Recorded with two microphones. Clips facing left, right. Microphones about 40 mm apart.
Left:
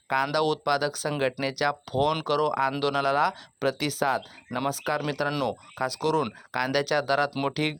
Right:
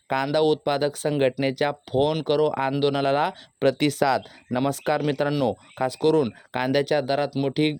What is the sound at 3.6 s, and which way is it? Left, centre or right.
Speech, right.